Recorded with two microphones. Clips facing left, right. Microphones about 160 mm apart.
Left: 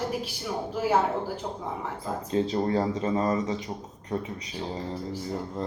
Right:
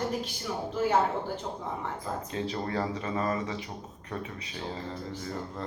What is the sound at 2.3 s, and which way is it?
A man's voice, 30° left (ahead or behind).